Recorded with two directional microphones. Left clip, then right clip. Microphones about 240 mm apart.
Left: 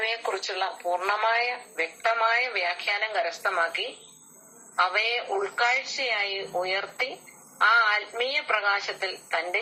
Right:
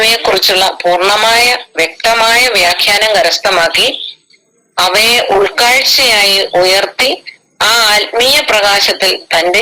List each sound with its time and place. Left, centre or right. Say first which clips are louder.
0.0 s speech: right 19 dB; right
4.8 s speech: right 16 dB; right